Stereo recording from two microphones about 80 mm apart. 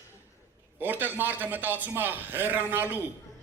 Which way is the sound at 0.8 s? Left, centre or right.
Right.